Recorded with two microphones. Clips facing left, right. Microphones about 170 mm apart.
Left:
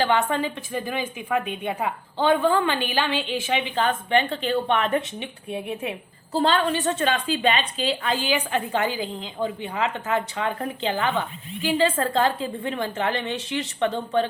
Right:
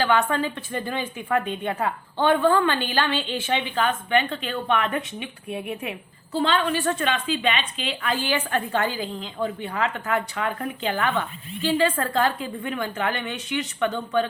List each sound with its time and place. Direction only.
0.0 s a woman's voice: 25° left (ahead or behind)
3.8 s a woman's voice: 30° left (ahead or behind)
6.3 s speech: 35° left (ahead or behind)
8.1 s a woman's voice: 15° left (ahead or behind)
11.8 s a woman's voice: 25° left (ahead or behind)